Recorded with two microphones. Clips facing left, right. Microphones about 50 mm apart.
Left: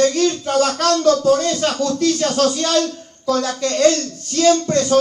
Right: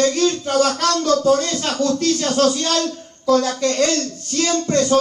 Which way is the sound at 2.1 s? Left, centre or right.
Left.